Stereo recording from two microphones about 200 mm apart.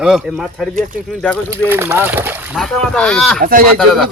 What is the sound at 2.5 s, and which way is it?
Speech, 5° left (ahead or behind).